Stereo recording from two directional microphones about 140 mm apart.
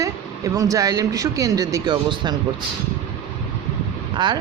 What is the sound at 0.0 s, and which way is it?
Speech, 25° right (ahead or behind).